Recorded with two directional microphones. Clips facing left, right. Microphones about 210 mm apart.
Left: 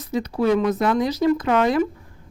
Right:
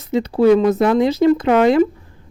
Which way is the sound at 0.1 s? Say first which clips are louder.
Right 7 dB; 30° right (ahead or behind).